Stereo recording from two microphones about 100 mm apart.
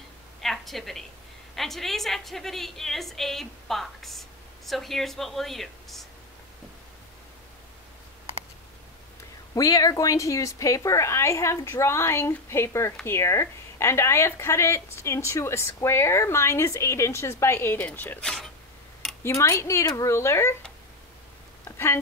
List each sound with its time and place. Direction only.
0.4 s a sound: centre (ahead or behind)
1.5 s a woman's voice: centre (ahead or behind)
9.6 s a woman's voice: 35° left (ahead or behind); by 18.2 s 15° left (ahead or behind)
18.2 s speech: 5° left (ahead or behind)
19.2 s a woman's voice: 30° left (ahead or behind)
21.6 s a sound: 25° left (ahead or behind)